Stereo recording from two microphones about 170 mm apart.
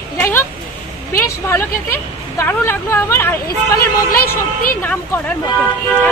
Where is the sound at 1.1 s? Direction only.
15° left (ahead or behind).